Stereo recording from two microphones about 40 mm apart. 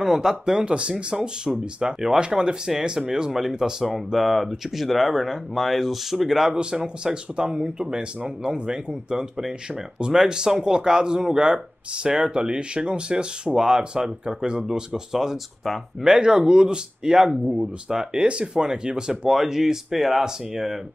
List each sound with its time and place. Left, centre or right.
0.0 s speech: centre
6.5 s speech: right
16.0 s speech: centre
17.8 s speech: centre